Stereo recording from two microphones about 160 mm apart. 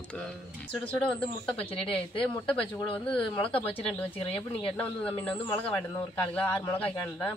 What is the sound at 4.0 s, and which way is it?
Speech, 10° left (ahead or behind).